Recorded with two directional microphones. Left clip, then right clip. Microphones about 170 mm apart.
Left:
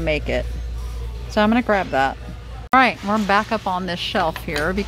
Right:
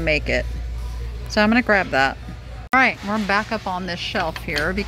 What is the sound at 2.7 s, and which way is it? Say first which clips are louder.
Speech: left 2 dB; 15° left (ahead or behind).